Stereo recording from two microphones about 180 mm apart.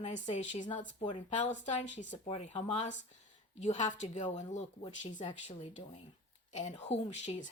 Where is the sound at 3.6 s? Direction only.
40° left (ahead or behind).